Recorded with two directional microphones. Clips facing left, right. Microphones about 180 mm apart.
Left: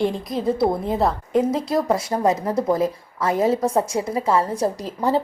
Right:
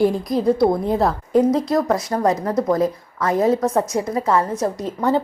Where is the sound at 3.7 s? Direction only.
30° left (ahead or behind).